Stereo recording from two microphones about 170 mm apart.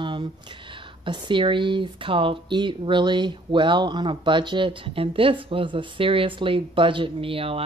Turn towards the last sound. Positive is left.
turn(degrees=-35)  # may be behind; listen again after turning